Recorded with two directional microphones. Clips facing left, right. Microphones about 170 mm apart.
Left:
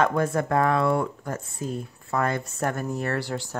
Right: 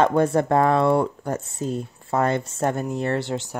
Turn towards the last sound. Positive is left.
turn(degrees=-20)  # may be behind; listen again after turning